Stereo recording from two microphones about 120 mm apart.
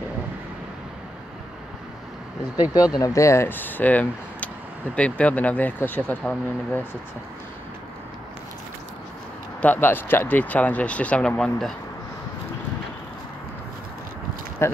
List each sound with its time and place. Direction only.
2.5 s speech: 35° left (ahead or behind); by 6.8 s 10° left (ahead or behind)
9.6 s speech: 15° left (ahead or behind)
14.6 s speech: 20° left (ahead or behind)